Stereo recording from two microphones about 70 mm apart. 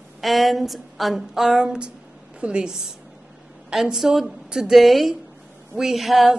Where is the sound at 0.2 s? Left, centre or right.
Centre.